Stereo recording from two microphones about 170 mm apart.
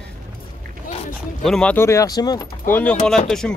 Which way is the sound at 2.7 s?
10° left (ahead or behind).